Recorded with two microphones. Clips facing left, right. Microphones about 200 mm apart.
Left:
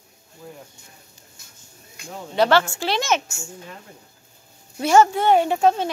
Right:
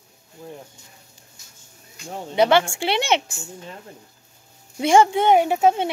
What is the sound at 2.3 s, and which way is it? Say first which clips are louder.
Speech: right 1 dB; 10° right (ahead or behind).